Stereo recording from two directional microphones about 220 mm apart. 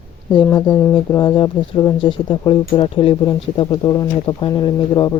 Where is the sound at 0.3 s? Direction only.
15° left (ahead or behind).